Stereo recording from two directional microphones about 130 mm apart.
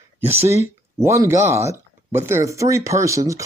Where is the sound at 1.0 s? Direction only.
20° right (ahead or behind).